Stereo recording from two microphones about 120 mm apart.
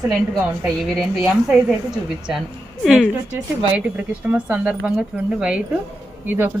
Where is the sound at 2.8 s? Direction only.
Centre (ahead or behind).